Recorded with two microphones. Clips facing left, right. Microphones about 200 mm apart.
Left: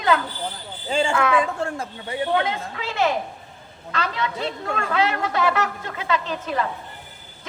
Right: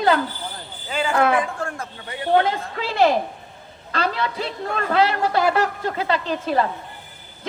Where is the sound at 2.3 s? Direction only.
35° right (ahead or behind).